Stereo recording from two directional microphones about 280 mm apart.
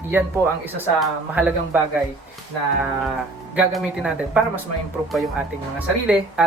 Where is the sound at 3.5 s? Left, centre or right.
Centre.